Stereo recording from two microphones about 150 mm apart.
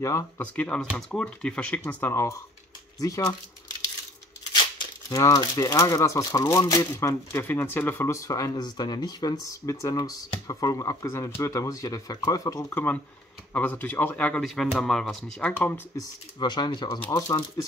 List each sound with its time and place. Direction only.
0.0 s speech: 20° left (ahead or behind)
0.6 s speech: 5° left (ahead or behind); by 3.3 s 25° left (ahead or behind)
5.1 s speech: 25° left (ahead or behind)
16.0 s speech: 30° left (ahead or behind)